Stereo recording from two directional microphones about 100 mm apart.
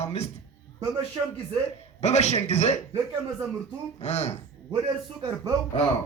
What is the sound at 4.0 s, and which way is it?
Speech, 90° left.